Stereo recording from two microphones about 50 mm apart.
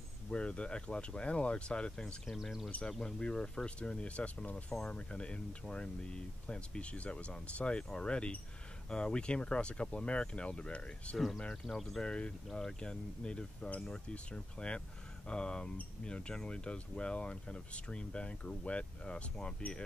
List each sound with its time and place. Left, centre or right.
0.3 s speech: left
2.2 s speech: centre
2.9 s speech: centre
11.6 s speech: centre
12.0 s speech: left